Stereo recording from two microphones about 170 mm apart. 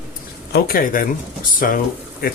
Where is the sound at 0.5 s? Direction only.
55° left (ahead or behind).